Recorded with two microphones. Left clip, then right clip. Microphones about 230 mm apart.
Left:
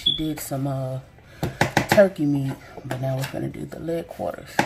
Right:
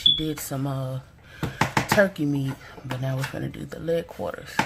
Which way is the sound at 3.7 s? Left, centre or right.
Right.